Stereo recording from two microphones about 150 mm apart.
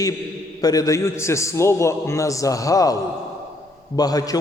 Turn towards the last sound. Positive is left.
turn(degrees=25)  # may be behind; listen again after turning